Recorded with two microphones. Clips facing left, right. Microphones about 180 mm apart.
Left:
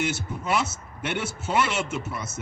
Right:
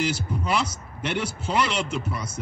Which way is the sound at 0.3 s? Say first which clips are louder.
Right 1 dB; 5° left (ahead or behind).